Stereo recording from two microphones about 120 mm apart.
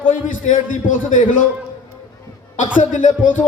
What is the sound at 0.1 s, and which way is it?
A man's voice, 90° left.